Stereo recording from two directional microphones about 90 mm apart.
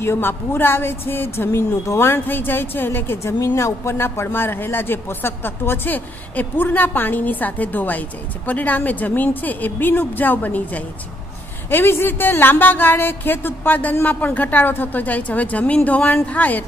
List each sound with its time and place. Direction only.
0.0 s speech: 25° left (ahead or behind)